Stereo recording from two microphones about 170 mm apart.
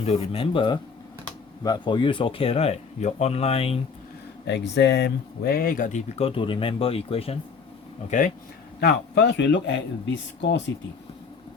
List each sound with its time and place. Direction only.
0.0 s speech: 35° left (ahead or behind)
4.4 s speech: 90° left; by 6.0 s 55° left (ahead or behind)
6.1 s speech: 30° left (ahead or behind)
8.8 s speech: 75° left (ahead or behind)